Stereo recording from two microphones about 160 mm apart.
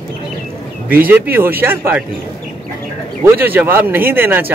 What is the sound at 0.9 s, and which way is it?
Speech, 10° right (ahead or behind).